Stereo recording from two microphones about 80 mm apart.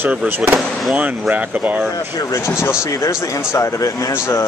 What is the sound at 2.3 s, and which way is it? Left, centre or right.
Speech, left.